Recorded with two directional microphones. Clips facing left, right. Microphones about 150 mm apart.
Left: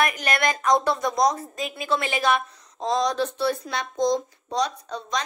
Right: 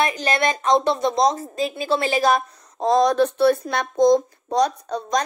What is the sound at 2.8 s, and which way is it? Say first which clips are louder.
Speech: right 7 dB; 55° right (ahead or behind).